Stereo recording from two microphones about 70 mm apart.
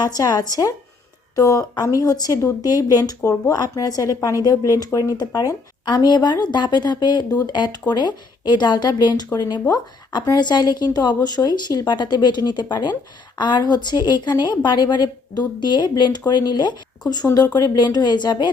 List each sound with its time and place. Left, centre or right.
0.0 s speech: left
5.1 s a woman's voice: left
17.3 s speech: left